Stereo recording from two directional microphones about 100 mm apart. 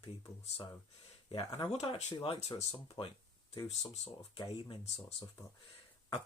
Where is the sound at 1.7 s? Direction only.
65° left (ahead or behind).